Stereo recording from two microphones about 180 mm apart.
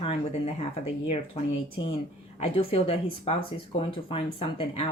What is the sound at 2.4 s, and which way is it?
Speech, 30° left (ahead or behind).